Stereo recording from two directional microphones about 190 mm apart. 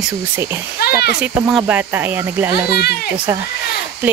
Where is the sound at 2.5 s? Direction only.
55° left (ahead or behind).